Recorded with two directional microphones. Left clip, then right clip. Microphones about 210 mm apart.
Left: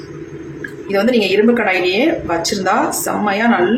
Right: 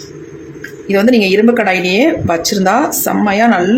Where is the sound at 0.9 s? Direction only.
35° right (ahead or behind).